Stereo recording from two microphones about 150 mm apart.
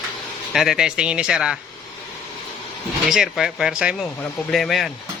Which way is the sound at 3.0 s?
Centre (ahead or behind).